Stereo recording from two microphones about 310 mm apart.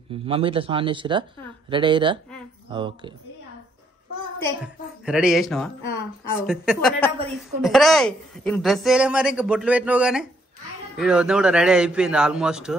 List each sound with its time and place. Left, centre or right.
0.1 s speech: centre
5.0 s a woman's voice: centre